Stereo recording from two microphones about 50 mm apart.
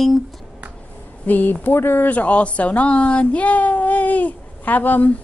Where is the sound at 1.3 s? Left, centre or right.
Left.